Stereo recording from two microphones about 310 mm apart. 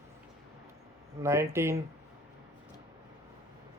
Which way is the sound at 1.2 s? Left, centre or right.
Centre.